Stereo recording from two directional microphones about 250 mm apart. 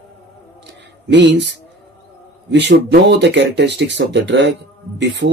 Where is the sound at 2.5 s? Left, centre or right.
Right.